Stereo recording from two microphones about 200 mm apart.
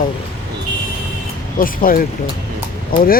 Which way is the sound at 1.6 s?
45° left (ahead or behind).